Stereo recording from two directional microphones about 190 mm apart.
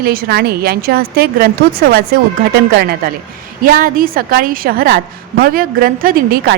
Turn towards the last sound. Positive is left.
turn(degrees=-50)  # may be behind; listen again after turning